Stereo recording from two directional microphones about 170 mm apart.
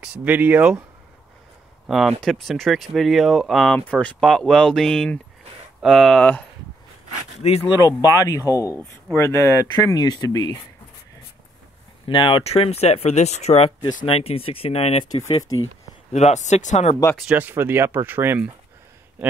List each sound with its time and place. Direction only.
0.0 s speech: 10° right (ahead or behind)
1.9 s speech: centre (ahead or behind)
7.4 s speech: 35° left (ahead or behind)
7.8 s speech: 20° left (ahead or behind)
12.1 s speech: 30° left (ahead or behind)
17.2 s speech: 10° right (ahead or behind)